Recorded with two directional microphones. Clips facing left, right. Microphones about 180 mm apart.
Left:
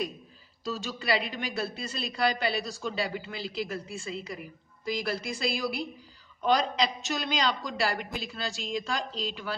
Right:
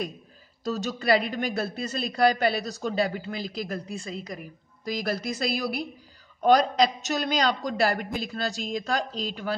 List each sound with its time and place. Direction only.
0.7 s a man's voice: 45° right (ahead or behind)